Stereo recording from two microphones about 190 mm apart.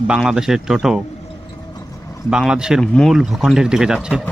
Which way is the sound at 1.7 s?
20° left (ahead or behind).